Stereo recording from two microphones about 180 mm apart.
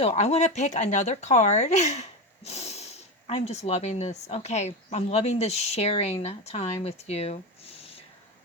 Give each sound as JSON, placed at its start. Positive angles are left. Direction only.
{"t": 0.0, "sound": "speech", "side_deg": 35}